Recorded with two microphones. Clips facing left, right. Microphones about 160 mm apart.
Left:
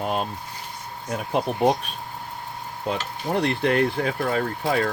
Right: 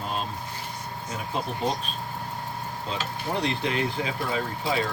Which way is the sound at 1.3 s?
60° left (ahead or behind).